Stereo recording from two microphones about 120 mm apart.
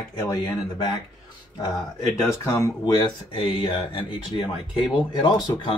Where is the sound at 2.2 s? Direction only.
25° left (ahead or behind); by 4.5 s 45° left (ahead or behind).